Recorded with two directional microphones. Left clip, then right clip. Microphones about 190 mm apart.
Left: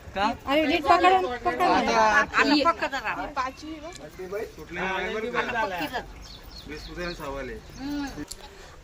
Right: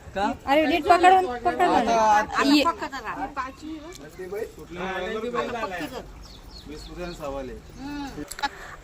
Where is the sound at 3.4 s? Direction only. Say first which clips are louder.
Left 5 dB; 50° left (ahead or behind).